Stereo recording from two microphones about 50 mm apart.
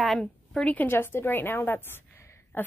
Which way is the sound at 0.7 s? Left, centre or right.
Left.